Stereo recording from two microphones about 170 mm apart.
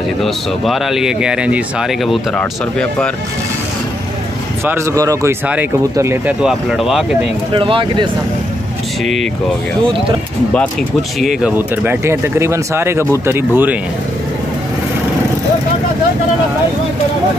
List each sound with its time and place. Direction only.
0.2 s speech: centre (ahead or behind)
4.6 s speech: 15° right (ahead or behind)
6.4 s speech: centre (ahead or behind)
7.5 s speech: 30° right (ahead or behind)
9.0 s speech: centre (ahead or behind)
11.1 s speech: centre (ahead or behind)
11.5 s speech: 10° right (ahead or behind)